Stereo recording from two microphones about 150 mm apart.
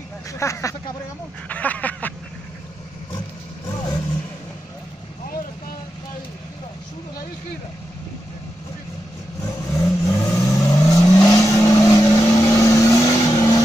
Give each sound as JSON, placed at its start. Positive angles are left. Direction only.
{"t": 0.3, "sound": "speech", "side_deg": 20}
{"t": 1.5, "sound": "a sound", "side_deg": 10}
{"t": 9.4, "sound": "vehicle", "side_deg": 20}